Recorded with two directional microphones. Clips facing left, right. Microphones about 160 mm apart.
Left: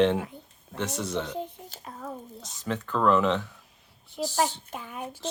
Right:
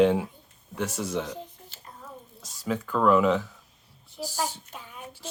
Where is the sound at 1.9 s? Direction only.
70° left (ahead or behind).